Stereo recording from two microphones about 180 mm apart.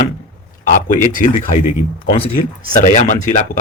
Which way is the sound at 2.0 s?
30° left (ahead or behind).